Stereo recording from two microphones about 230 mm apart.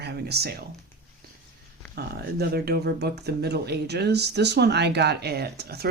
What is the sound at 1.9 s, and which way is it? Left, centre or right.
Speech, right.